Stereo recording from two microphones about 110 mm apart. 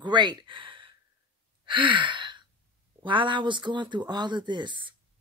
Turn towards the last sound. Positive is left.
turn(degrees=-45)  # may be behind; listen again after turning